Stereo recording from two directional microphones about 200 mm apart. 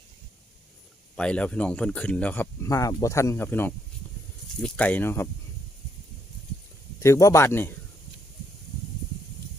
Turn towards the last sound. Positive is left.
turn(degrees=10)  # may be behind; listen again after turning